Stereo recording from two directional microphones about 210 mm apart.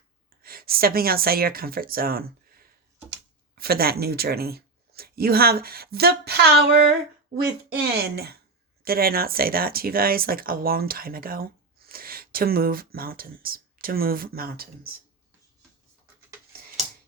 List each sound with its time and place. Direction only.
0.4 s speech: 45° right (ahead or behind)
8.0 s speech: 50° right (ahead or behind)